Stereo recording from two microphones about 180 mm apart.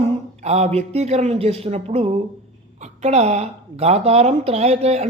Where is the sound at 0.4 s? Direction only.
35° right (ahead or behind).